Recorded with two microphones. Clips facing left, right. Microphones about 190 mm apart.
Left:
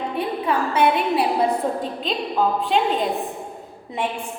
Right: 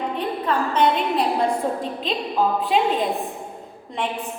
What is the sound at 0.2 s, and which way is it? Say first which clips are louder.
A woman's voice: left 2 dB; 10° left (ahead or behind).